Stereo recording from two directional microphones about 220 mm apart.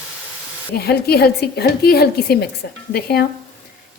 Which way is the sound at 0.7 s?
45° left (ahead or behind).